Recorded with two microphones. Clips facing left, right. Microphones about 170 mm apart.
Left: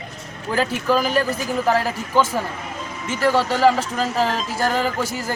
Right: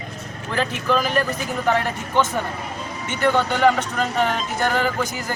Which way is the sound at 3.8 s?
35° left (ahead or behind).